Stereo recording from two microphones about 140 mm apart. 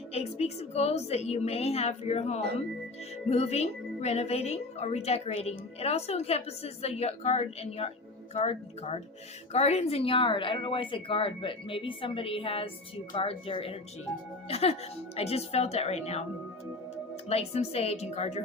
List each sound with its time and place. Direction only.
0.1 s a woman's voice: 50° left (ahead or behind)
17.2 s a woman's voice: 50° left (ahead or behind)